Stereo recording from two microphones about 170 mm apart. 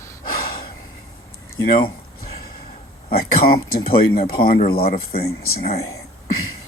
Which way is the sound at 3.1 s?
60° left (ahead or behind).